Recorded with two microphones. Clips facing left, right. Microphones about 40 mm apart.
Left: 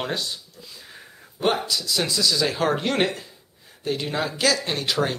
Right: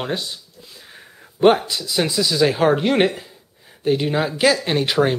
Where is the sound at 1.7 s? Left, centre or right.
Centre.